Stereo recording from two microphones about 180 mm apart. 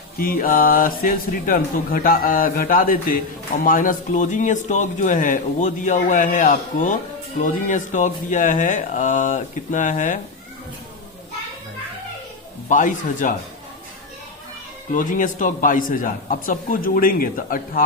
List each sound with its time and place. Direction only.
0.2 s speech: 50° left (ahead or behind)
12.6 s speech: 45° left (ahead or behind)
14.9 s speech: 45° left (ahead or behind)